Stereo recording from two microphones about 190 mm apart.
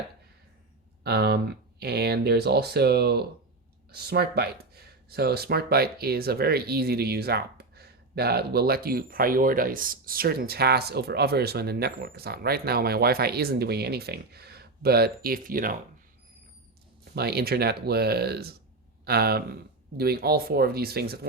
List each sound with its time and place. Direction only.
1.0 s speech: 60° right (ahead or behind)
17.2 s speech: 55° right (ahead or behind)